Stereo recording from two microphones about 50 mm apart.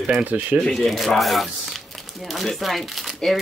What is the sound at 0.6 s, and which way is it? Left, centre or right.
Speech, centre.